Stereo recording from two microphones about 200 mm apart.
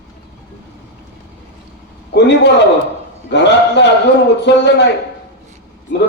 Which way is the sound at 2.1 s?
60° left (ahead or behind).